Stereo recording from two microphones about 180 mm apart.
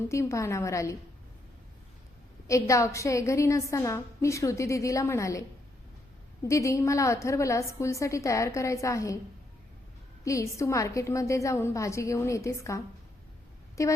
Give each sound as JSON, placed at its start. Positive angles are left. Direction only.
{"t": 0.1, "sound": "a woman's voice", "side_deg": 15}
{"t": 2.5, "sound": "a woman's voice", "side_deg": 15}
{"t": 6.4, "sound": "a woman's voice", "side_deg": 15}
{"t": 10.2, "sound": "a woman's voice", "side_deg": 15}